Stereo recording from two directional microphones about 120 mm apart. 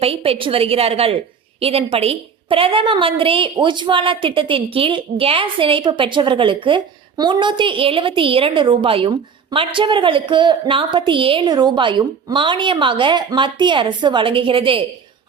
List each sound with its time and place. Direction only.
0.0 s a woman's voice: 55° right (ahead or behind)